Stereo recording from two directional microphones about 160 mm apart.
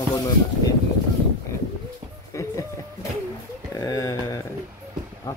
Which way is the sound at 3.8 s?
20° left (ahead or behind).